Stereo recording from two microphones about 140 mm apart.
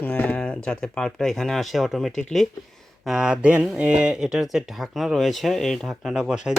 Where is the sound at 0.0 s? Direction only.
10° left (ahead or behind).